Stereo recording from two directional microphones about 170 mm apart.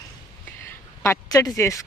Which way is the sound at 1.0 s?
20° left (ahead or behind).